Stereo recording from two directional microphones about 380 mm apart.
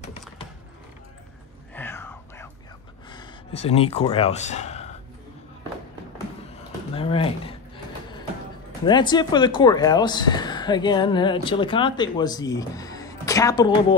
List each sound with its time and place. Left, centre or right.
1.8 s whispering: centre
3.1 s speech: centre
7.0 s speech: centre
8.8 s speech: centre